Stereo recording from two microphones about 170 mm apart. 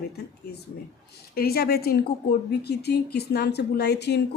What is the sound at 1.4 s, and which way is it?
A woman's voice, 65° left (ahead or behind).